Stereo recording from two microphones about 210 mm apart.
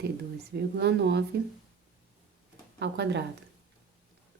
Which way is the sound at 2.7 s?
55° right (ahead or behind).